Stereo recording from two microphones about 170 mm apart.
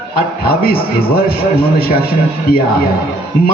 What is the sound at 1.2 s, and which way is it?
A man's voice, 60° left (ahead or behind).